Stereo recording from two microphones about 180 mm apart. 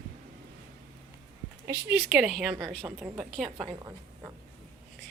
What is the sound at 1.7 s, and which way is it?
A woman's voice, 10° right (ahead or behind).